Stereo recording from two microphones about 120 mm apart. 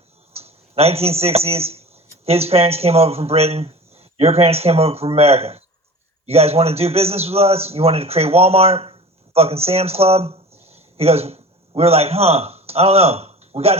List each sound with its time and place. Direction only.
0.3 s a man's voice: 55° right (ahead or behind)